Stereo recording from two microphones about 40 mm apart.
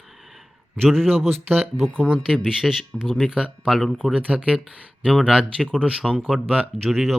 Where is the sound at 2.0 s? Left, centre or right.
Centre.